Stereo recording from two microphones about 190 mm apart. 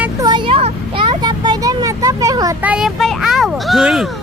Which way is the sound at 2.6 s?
5° right (ahead or behind).